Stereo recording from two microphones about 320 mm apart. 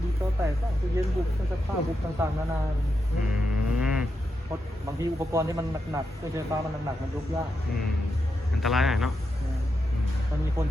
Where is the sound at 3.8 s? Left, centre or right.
Centre.